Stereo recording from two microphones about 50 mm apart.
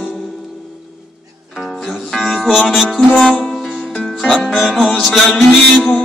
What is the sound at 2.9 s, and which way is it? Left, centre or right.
Music, centre.